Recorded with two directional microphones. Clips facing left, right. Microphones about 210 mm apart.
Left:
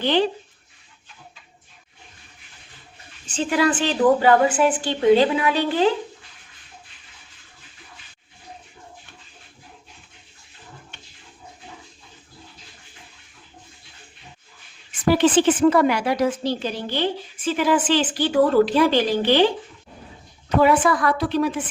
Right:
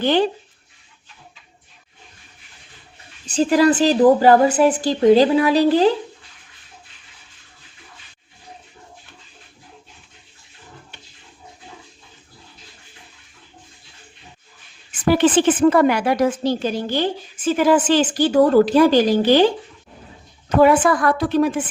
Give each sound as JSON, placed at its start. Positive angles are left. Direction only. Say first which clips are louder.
{"t": 0.0, "sound": "a woman's voice", "louder": "right 3 dB", "side_deg": -45}
{"t": 3.2, "sound": "a woman's voice", "louder": "right 6 dB", "side_deg": -40}
{"t": 15.2, "sound": "a woman's voice", "louder": "right 2 dB", "side_deg": -50}